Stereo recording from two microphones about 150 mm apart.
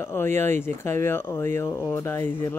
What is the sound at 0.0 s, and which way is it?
Speech, 15° left (ahead or behind).